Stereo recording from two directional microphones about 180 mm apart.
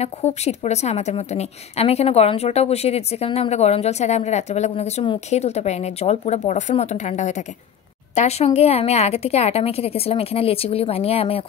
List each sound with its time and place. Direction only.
0.0 s a woman's voice: 35° left (ahead or behind)